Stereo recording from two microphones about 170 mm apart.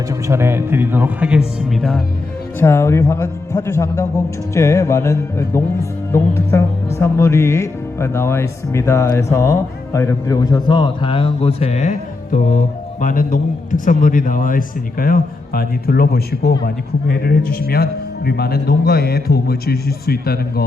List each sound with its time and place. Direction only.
0.1 s speech: 15° right (ahead or behind); by 2.0 s centre (ahead or behind)
2.6 s a man's voice: 15° left (ahead or behind); by 20.7 s 65° left (ahead or behind)